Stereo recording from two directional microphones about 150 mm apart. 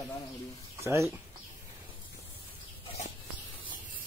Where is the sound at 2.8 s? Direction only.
45° left (ahead or behind).